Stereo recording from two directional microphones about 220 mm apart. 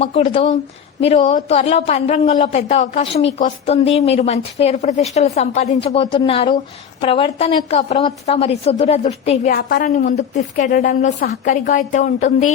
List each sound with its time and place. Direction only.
0.0 s a woman's voice: 25° left (ahead or behind)
9.6 s a woman's voice: 45° left (ahead or behind)